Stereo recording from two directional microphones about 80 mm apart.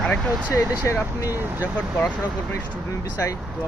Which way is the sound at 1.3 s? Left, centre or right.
Right.